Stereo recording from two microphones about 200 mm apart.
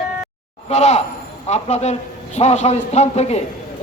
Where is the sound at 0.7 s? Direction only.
35° left (ahead or behind).